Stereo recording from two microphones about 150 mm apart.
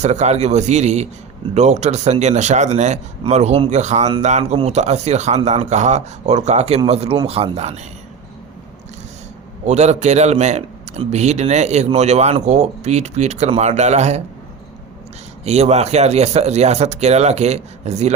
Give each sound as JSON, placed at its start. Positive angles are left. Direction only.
{"t": 0.0, "sound": "speech", "side_deg": -50}
{"t": 9.6, "sound": "speech", "side_deg": -50}
{"t": 15.4, "sound": "speech", "side_deg": -45}